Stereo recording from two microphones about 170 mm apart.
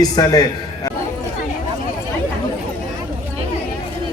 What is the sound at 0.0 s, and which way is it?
Speech, 20° left (ahead or behind).